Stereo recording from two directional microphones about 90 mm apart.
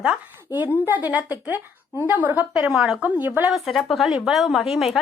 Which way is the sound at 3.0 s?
20° right (ahead or behind).